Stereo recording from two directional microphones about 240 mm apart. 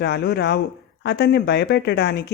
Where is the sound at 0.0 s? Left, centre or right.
Left.